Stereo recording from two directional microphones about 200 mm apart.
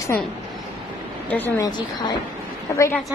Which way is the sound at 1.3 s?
10° left (ahead or behind).